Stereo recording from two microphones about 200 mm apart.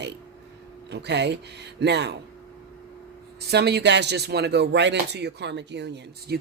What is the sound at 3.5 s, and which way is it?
Speech, 55° right (ahead or behind).